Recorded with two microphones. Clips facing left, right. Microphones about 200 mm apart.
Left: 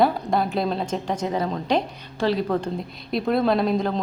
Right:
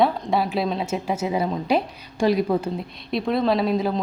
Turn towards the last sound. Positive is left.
turn(degrees=0)  # may be behind; listen again after turning